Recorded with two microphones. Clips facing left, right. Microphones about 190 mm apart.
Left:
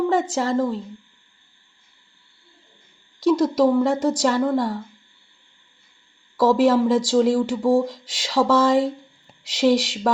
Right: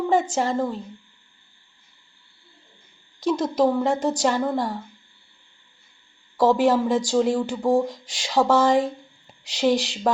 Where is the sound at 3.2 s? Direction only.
90° left.